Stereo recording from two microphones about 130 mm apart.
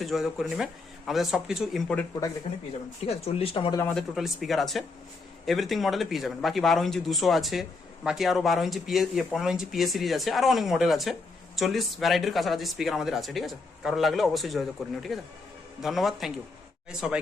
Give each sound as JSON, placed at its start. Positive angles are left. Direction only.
{"t": 0.0, "sound": "speech", "side_deg": 0}
{"t": 3.1, "sound": "speech", "side_deg": 50}
{"t": 3.9, "sound": "speech", "side_deg": 0}